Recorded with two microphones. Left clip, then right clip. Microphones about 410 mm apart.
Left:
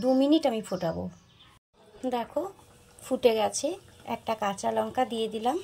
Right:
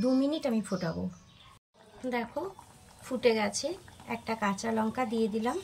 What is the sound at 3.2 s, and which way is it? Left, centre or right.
Speech, centre.